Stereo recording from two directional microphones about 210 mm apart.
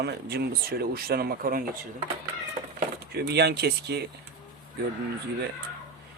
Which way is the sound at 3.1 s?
50° right (ahead or behind).